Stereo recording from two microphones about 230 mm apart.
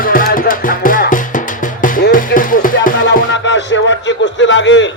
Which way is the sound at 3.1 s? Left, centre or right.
Left.